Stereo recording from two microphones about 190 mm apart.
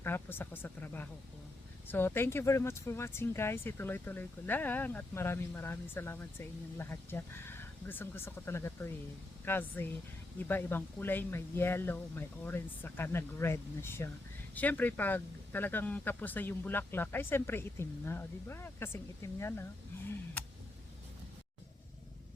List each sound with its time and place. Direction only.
0.0 s speech: 10° left (ahead or behind)